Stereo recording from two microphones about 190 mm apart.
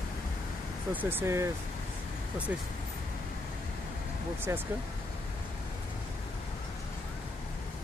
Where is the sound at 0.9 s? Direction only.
10° right (ahead or behind).